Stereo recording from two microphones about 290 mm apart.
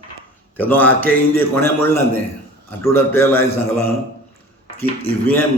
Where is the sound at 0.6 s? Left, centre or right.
Centre.